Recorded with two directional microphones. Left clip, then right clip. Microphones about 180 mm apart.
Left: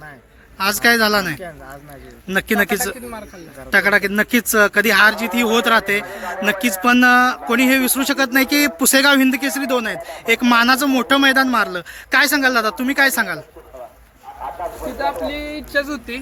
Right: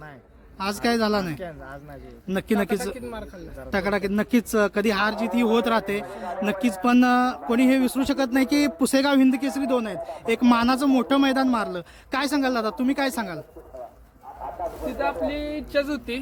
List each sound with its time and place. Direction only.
0.6 s speech: centre (ahead or behind)
14.4 s a sound: 45° right (ahead or behind)
14.9 s speech: 25° right (ahead or behind)
15.5 s speech: 35° right (ahead or behind)